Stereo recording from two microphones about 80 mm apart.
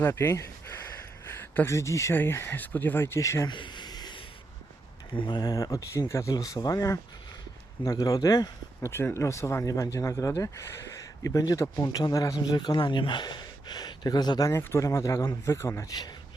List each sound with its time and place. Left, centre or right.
0.0 s speech: left
1.3 s a sound: left
1.7 s speech: left
3.2 s speech: left
3.4 s a sound: left
5.1 s speech: left
6.3 s speech: left
8.9 s speech: left
11.8 s a man's voice: left
12.5 s speech: left
14.5 s speech: left
15.9 s a man's voice: left